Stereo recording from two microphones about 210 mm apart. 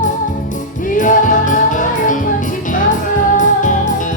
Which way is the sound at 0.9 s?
40° left (ahead or behind).